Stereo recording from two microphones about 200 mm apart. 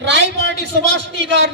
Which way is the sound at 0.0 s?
60° right (ahead or behind).